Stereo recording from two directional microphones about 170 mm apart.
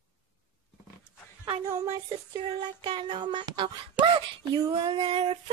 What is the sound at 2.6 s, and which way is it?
Speech, 25° right (ahead or behind).